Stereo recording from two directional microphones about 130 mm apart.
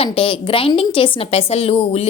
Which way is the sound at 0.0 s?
45° left (ahead or behind).